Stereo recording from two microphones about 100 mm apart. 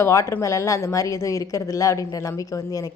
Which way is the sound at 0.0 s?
30° left (ahead or behind).